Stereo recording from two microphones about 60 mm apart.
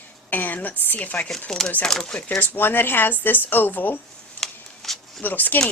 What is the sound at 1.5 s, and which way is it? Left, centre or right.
Speech, centre.